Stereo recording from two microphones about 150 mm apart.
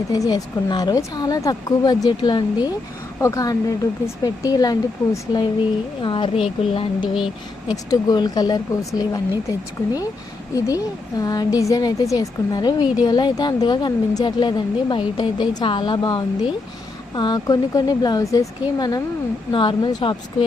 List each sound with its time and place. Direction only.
0.1 s a woman's voice: 25° left (ahead or behind)